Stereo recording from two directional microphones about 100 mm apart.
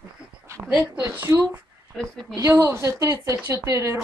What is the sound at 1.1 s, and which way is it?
A woman's voice, 25° right (ahead or behind).